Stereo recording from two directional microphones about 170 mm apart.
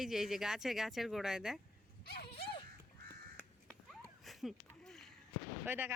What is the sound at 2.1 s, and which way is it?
Dog, 65° left (ahead or behind).